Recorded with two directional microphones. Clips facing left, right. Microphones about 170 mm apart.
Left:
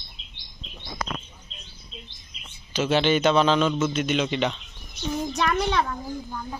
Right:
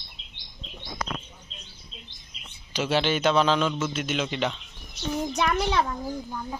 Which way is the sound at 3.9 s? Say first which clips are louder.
Left 4 dB; 5° right (ahead or behind).